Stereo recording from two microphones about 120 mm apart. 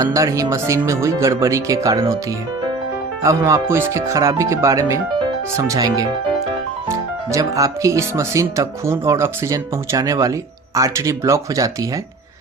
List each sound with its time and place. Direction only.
0.0 s speech: 25° right (ahead or behind)
3.2 s speech: 25° right (ahead or behind)